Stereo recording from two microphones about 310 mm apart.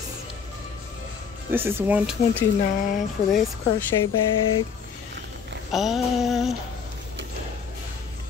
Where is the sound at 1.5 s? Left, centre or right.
Centre.